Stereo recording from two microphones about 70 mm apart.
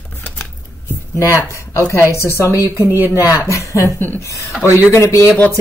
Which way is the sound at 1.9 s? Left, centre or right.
Left.